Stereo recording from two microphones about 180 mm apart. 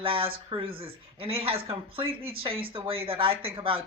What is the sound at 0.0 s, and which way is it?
A woman's voice, 30° right (ahead or behind).